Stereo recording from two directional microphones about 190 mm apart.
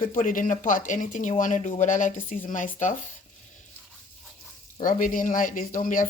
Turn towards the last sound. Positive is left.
turn(degrees=45)  # may be behind; listen again after turning